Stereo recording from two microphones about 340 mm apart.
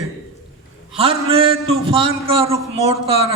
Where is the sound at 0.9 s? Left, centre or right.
Centre.